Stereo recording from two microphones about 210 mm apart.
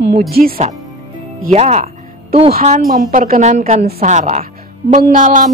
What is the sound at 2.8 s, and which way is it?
Speech, 45° right (ahead or behind).